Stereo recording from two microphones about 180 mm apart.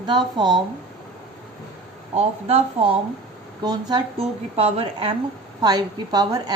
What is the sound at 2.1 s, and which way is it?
Speech, 35° right (ahead or behind).